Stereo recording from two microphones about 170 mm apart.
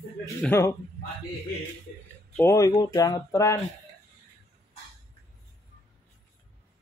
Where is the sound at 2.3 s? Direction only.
15° left (ahead or behind).